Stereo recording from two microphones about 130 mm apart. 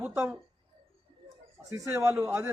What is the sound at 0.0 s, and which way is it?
Speech, 10° right (ahead or behind).